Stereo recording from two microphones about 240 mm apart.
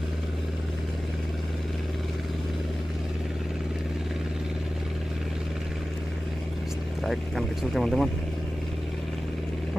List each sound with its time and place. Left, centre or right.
7.0 s speech: centre